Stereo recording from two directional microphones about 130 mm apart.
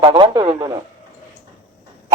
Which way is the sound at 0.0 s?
35° right (ahead or behind).